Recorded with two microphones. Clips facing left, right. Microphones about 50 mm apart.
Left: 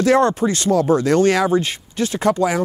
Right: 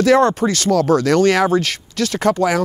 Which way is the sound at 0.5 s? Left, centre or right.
Right.